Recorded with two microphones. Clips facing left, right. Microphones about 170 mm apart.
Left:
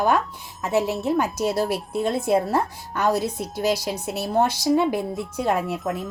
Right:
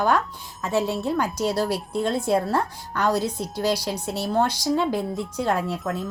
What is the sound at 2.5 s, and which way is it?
A woman's voice, 25° left (ahead or behind).